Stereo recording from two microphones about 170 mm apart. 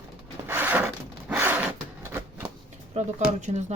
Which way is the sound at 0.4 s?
10° right (ahead or behind).